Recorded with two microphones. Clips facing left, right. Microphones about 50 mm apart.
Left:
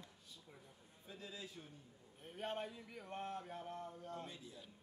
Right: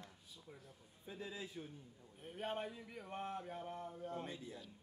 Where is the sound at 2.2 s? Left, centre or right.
Centre.